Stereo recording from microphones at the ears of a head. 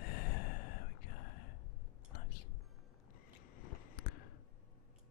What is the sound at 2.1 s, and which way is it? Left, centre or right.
Music, left.